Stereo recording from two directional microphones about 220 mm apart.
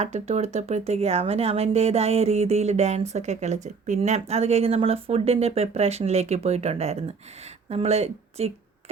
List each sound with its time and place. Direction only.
0.0 s speech: 30° right (ahead or behind)